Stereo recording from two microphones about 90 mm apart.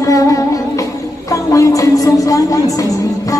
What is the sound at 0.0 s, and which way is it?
Music, 40° left (ahead or behind).